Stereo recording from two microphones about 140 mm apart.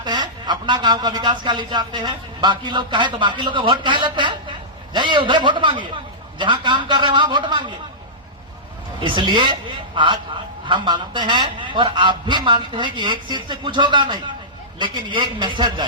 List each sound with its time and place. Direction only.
0.0 s speech: 30° right (ahead or behind)
9.0 s speech: 35° right (ahead or behind)